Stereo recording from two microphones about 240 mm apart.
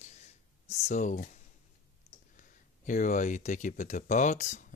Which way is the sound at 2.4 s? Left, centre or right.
Left.